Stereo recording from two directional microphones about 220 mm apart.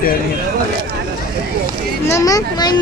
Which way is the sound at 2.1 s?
15° left (ahead or behind).